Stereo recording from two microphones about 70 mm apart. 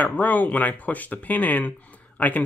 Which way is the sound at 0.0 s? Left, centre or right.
Left.